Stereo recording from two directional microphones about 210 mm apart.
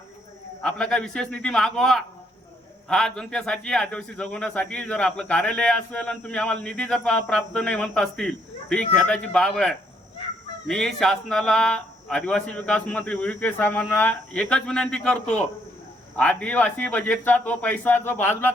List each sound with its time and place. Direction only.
0.6 s a man's voice: 5° left (ahead or behind)